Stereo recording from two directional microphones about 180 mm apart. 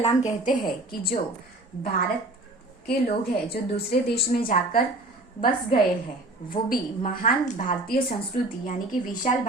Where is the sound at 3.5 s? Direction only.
60° left (ahead or behind).